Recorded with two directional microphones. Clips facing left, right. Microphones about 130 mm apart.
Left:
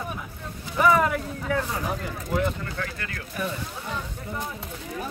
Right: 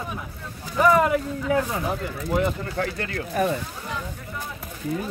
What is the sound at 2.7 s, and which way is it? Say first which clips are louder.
Speech: right 6 dB; 35° right (ahead or behind).